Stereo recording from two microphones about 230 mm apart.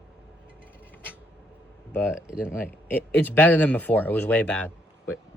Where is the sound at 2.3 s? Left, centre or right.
Centre.